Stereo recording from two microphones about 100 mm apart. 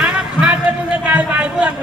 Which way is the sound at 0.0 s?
10° right (ahead or behind).